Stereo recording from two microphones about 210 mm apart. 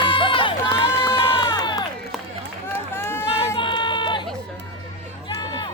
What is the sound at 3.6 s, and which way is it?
Run, 20° left (ahead or behind).